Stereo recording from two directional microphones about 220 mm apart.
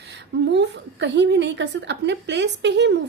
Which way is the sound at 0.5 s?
50° right (ahead or behind).